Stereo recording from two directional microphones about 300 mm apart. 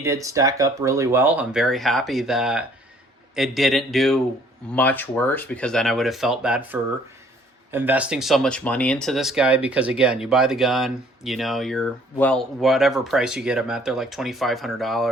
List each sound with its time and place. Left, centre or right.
0.0 s speech: centre